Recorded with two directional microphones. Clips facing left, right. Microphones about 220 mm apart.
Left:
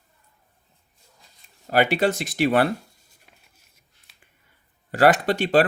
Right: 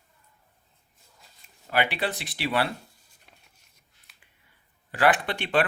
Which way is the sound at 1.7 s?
45° left (ahead or behind).